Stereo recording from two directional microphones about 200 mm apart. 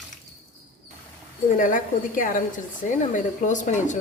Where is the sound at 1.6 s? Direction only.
40° left (ahead or behind).